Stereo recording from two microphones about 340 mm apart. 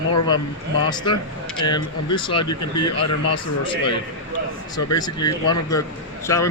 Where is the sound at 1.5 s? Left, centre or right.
Centre.